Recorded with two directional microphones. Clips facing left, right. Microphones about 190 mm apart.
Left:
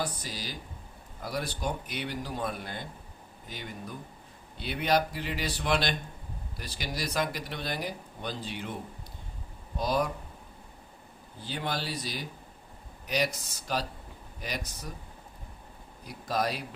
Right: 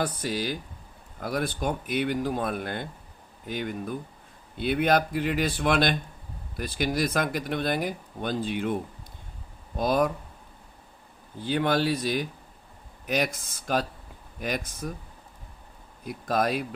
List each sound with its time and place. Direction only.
0.0 s speech: 55° right (ahead or behind)
9.7 s speech: 50° right (ahead or behind)
11.4 s speech: 55° right (ahead or behind)
16.0 s speech: 50° right (ahead or behind)